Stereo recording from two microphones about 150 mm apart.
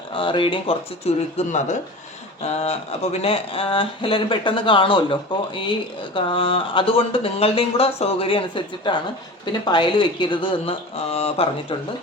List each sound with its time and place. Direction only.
0.1 s speech: 35° left (ahead or behind)
6.1 s speech: 35° left (ahead or behind)